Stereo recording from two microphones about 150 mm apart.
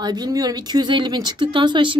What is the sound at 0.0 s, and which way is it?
A woman's voice, 25° right (ahead or behind).